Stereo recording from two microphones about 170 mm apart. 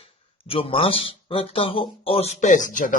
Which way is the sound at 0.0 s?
35° left (ahead or behind).